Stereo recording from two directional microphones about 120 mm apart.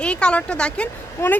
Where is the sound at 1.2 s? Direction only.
20° left (ahead or behind).